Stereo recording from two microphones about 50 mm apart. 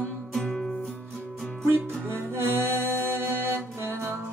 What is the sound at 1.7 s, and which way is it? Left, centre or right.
Music, right.